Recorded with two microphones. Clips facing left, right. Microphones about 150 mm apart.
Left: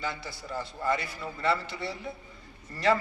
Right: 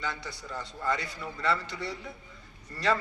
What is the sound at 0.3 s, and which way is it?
A man's voice, 25° left (ahead or behind).